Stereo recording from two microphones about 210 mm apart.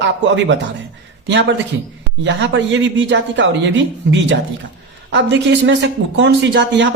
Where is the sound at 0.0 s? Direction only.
60° right (ahead or behind).